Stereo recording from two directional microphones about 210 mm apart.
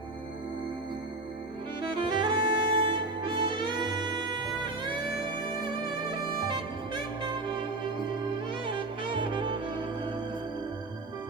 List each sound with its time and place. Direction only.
1.8 s music: 25° right (ahead or behind)
4.6 s bagpipes: 20° right (ahead or behind)
6.1 s music: 20° right (ahead or behind)